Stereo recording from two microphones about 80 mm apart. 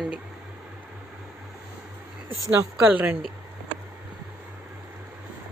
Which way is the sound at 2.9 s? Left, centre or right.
Right.